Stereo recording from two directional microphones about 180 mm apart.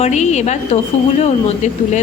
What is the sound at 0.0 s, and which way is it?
A woman's voice, 40° left (ahead or behind).